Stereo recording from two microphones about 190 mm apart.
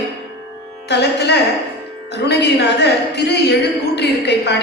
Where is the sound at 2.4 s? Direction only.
60° left (ahead or behind).